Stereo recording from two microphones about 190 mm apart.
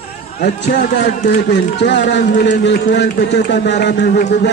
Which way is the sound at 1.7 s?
65° left (ahead or behind).